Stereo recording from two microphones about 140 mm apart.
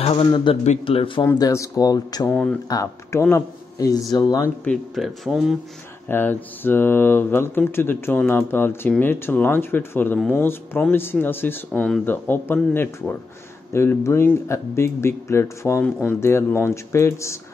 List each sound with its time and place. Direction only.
0.0 s speech: 40° left (ahead or behind)
1.4 s speech: 25° left (ahead or behind)
2.2 s speech: 10° left (ahead or behind)
2.7 s speech: 20° left (ahead or behind)
4.6 s speech: centre (ahead or behind)
6.0 s speech: 15° left (ahead or behind)